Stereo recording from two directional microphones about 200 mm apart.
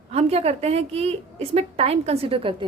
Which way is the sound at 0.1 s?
30° right (ahead or behind).